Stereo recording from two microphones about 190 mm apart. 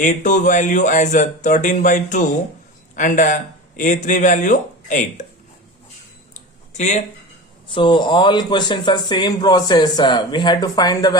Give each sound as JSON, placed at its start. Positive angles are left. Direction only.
{"t": 0.0, "sound": "speech", "side_deg": 40}
{"t": 6.7, "sound": "speech", "side_deg": 40}
{"t": 7.7, "sound": "speech", "side_deg": 25}